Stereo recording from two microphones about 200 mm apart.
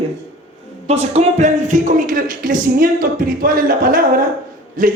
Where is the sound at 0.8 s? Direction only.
30° right (ahead or behind).